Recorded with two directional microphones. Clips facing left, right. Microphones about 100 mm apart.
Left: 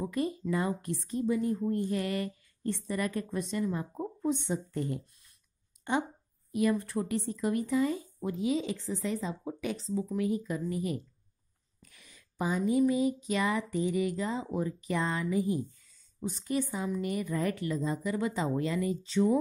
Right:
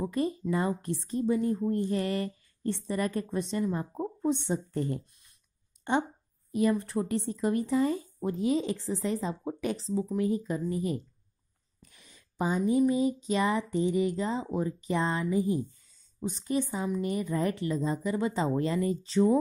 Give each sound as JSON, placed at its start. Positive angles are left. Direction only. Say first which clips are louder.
{"t": 0.0, "sound": "speech", "louder": "right 2 dB", "side_deg": -30}
{"t": 6.5, "sound": "speech", "louder": "right 2 dB", "side_deg": -30}